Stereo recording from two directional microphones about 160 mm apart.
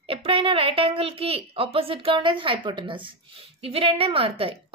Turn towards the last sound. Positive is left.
turn(degrees=-35)  # may be behind; listen again after turning